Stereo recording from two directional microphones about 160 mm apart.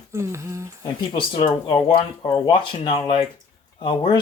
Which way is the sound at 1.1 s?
35° left (ahead or behind).